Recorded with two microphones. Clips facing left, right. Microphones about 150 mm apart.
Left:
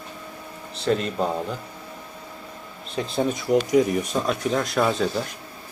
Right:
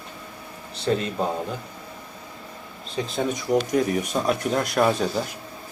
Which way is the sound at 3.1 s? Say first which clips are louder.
Left 2 dB; 5° left (ahead or behind).